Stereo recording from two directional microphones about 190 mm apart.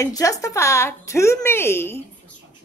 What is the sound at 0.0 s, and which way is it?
Speech, 15° left (ahead or behind).